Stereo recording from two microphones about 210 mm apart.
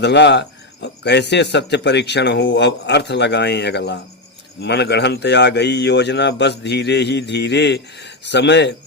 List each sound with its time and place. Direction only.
0.0 s speech: 55° left (ahead or behind)